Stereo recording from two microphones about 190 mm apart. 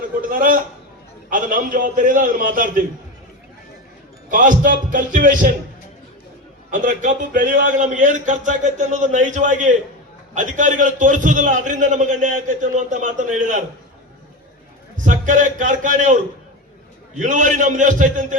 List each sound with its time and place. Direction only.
0.2 s a man's voice: 45° right (ahead or behind)
4.3 s a man's voice: 45° right (ahead or behind)
6.7 s a man's voice: 45° right (ahead or behind)
15.0 s a man's voice: 40° right (ahead or behind)
17.2 s a man's voice: 40° right (ahead or behind)